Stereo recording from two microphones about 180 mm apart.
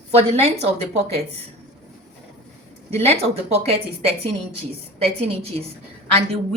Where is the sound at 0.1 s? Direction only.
35° right (ahead or behind).